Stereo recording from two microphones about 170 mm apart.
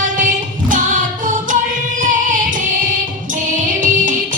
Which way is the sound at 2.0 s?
50° right (ahead or behind).